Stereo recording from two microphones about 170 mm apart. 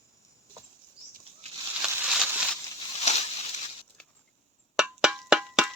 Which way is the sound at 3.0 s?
40° left (ahead or behind).